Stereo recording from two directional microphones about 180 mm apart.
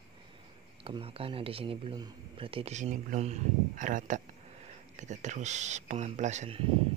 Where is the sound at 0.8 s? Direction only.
30° right (ahead or behind).